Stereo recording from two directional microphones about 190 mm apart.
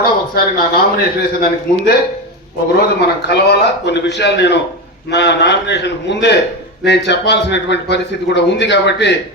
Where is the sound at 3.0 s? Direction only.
65° left (ahead or behind).